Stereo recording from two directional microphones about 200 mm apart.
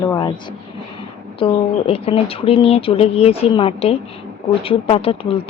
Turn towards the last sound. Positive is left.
turn(degrees=30)  # may be behind; listen again after turning